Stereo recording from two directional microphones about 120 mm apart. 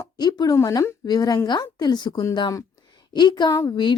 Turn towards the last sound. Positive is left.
turn(degrees=25)  # may be behind; listen again after turning